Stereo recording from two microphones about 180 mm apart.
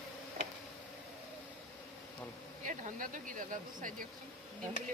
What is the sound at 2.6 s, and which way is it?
Speech, 45° right (ahead or behind).